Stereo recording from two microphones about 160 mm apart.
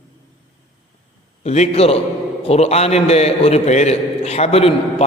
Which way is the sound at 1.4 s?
45° left (ahead or behind).